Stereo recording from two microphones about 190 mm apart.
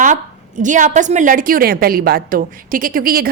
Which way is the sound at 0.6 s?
40° right (ahead or behind).